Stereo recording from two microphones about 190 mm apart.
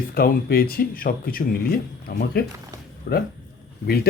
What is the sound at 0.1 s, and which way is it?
A man's voice, 50° left (ahead or behind).